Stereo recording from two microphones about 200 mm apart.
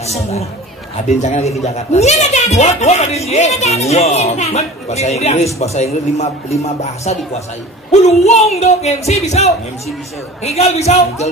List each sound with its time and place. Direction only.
0.0 s speech: 30° left (ahead or behind)